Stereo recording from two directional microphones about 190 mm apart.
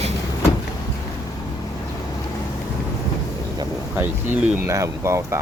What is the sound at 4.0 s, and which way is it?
Speech, 10° right (ahead or behind).